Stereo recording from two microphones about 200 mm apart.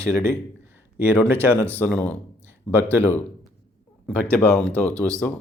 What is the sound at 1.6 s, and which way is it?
Speech, 5° left (ahead or behind).